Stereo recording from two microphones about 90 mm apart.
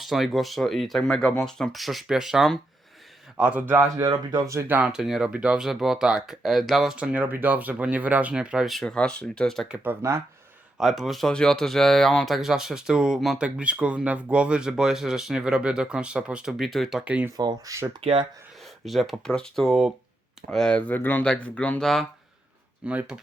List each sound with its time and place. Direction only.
0.0 s speech: centre (ahead or behind); by 3.8 s 20° right (ahead or behind)
3.9 s speech: 50° right (ahead or behind)
4.9 s speech: 5° right (ahead or behind)
6.9 s speech: 15° right (ahead or behind)
8.7 s speech: 5° left (ahead or behind)
9.6 s speech: 10° right (ahead or behind)
9.9 s speech: 30° right (ahead or behind)
10.8 s speech: 5° right (ahead or behind)
17.0 s speech: 15° right (ahead or behind)
17.3 s speech: 45° right (ahead or behind)
18.0 s speech: 90° right
18.9 s speech: centre (ahead or behind)
20.7 s speech: 20° left (ahead or behind)
22.9 s speech: 15° right (ahead or behind)